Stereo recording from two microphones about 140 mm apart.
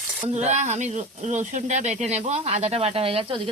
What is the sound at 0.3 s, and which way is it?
Speech, 55° right (ahead or behind).